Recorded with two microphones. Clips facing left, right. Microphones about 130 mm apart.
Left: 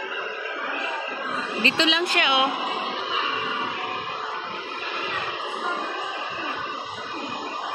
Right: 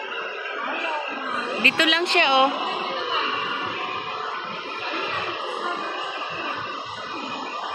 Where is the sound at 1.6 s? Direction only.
25° left (ahead or behind).